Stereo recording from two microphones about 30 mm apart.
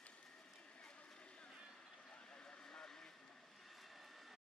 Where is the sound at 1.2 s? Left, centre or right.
Left.